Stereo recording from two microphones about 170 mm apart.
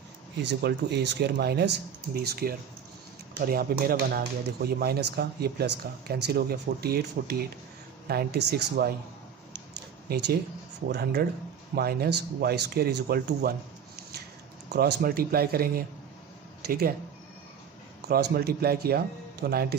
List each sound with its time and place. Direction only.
0.4 s speech: 85° right
10.0 s speech: 70° right (ahead or behind)
14.7 s speech: 70° right (ahead or behind)
18.0 s speech: 65° right (ahead or behind)